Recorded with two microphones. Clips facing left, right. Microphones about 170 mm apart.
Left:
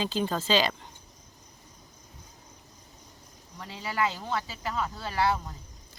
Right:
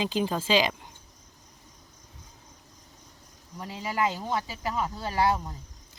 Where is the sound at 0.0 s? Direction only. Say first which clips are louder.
Right 1 dB; 10° right (ahead or behind).